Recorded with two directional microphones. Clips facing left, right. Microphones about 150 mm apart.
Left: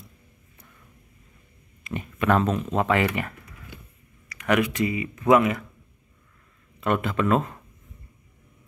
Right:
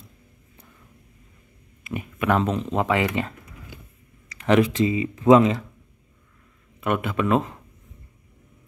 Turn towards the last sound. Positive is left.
turn(degrees=-15)  # may be behind; listen again after turning